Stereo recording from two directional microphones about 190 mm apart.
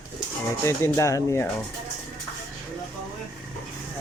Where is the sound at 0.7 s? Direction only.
15° left (ahead or behind).